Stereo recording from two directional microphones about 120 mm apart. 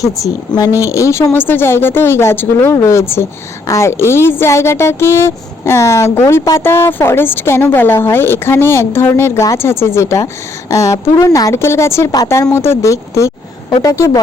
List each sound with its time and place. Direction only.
0.0 s speech: 30° left (ahead or behind)